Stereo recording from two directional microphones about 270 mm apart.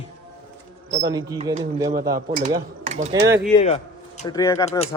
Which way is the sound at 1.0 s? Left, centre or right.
Centre.